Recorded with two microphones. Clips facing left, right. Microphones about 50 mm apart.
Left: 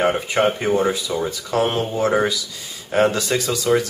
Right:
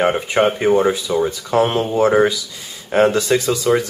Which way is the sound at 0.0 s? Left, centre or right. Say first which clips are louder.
Right 2 dB; centre.